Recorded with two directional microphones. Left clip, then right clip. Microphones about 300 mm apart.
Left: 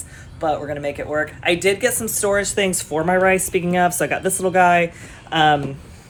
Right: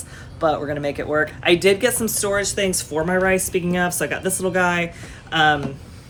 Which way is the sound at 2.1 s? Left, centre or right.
Centre.